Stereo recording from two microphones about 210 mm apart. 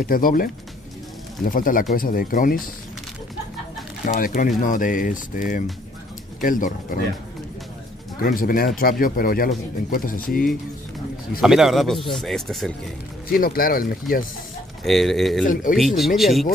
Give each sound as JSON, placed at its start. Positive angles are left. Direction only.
{"t": 0.0, "sound": "speech", "side_deg": 40}
{"t": 4.0, "sound": "speech", "side_deg": 40}
{"t": 8.2, "sound": "speech", "side_deg": 45}
{"t": 11.4, "sound": "speech", "side_deg": 0}
{"t": 13.3, "sound": "speech", "side_deg": 45}
{"t": 14.9, "sound": "speech", "side_deg": 0}
{"t": 15.4, "sound": "speech", "side_deg": 40}
{"t": 15.7, "sound": "speech", "side_deg": 0}